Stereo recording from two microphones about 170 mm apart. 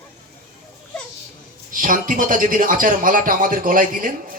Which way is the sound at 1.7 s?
50° right (ahead or behind).